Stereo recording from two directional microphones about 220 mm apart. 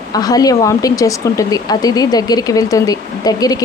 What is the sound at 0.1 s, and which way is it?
Speech, 15° left (ahead or behind).